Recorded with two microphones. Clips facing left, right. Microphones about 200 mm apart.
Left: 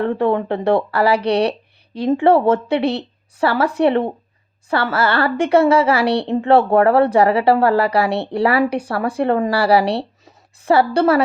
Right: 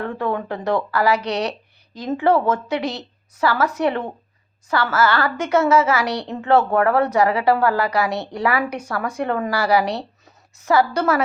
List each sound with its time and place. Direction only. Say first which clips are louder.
0.0 s a woman's voice: left 6 dB; 25° left (ahead or behind)